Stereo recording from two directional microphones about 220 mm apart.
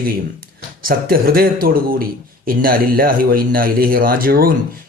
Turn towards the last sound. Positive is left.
turn(degrees=-40)  # may be behind; listen again after turning